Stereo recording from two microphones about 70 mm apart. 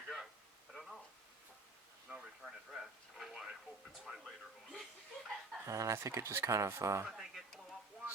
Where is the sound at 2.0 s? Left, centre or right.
Centre.